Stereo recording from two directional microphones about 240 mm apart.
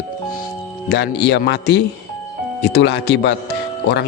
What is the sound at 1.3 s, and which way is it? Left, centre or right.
Speech, left.